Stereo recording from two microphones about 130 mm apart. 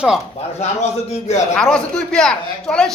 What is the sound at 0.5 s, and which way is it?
Speech, 60° left (ahead or behind).